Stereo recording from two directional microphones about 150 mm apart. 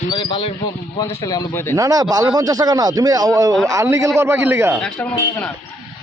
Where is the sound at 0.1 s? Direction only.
35° left (ahead or behind).